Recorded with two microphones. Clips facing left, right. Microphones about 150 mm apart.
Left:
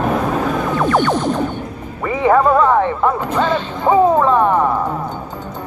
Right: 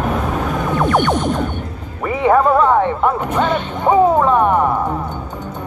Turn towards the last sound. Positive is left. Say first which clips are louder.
# even
turn(degrees=-15)  # may be behind; listen again after turning